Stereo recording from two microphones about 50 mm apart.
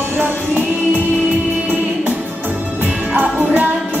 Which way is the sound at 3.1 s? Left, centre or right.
Right.